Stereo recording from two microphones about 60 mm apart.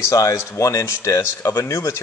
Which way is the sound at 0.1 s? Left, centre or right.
Left.